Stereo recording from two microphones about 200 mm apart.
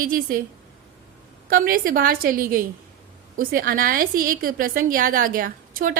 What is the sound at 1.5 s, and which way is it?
A woman's voice, 45° right (ahead or behind).